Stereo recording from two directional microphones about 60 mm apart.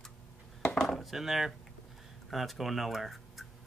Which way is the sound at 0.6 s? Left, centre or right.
Centre.